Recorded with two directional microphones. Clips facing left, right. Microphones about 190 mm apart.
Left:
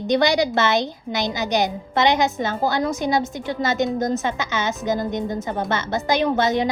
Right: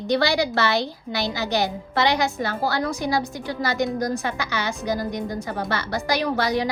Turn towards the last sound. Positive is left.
turn(degrees=20)  # may be behind; listen again after turning